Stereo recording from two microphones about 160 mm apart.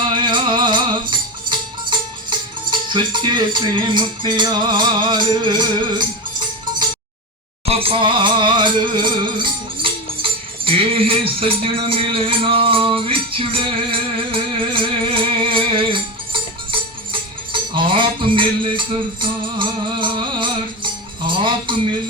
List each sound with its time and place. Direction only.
0.1 s music: 30° right (ahead or behind)
7.7 s music: 35° right (ahead or behind)